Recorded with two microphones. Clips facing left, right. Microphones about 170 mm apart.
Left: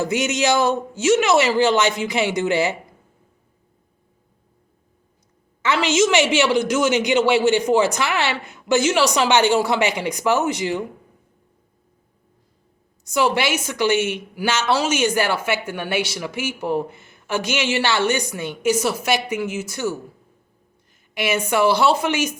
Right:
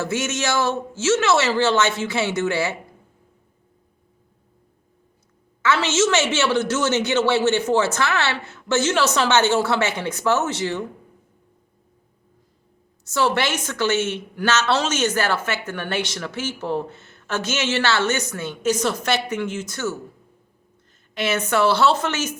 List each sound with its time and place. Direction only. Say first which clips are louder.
0.0 s a woman's voice: left 4 dB; 15° left (ahead or behind)
5.6 s a woman's voice: left 1 dB; 15° left (ahead or behind)
13.1 s a woman's voice: left 1 dB; 15° left (ahead or behind)
21.2 s a woman's voice: left 1 dB; 10° left (ahead or behind)